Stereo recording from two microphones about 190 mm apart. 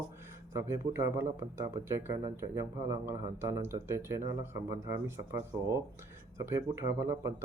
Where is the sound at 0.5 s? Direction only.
15° right (ahead or behind).